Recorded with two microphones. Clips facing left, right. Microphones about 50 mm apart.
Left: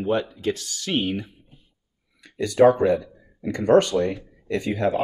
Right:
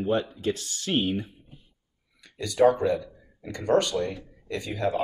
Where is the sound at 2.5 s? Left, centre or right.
Left.